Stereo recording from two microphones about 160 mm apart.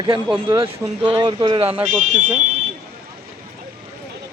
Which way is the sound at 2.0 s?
50° right (ahead or behind).